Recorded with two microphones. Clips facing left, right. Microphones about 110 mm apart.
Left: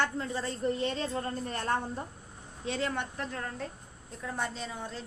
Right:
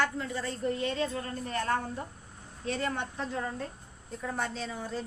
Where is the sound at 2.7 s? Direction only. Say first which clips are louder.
Even; centre (ahead or behind).